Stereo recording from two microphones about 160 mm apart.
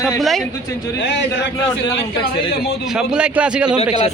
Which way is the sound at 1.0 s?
90° left.